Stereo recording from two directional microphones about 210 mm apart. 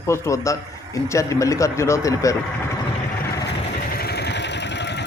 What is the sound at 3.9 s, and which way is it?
Vehicle, 50° left (ahead or behind).